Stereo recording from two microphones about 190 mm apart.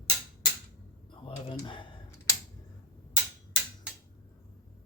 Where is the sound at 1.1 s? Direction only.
30° left (ahead or behind).